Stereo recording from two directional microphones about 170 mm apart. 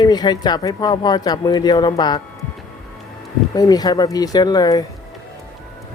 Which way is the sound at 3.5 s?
25° left (ahead or behind).